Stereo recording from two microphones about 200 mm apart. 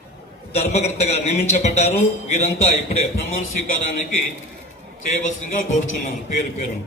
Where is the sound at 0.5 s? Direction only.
35° left (ahead or behind).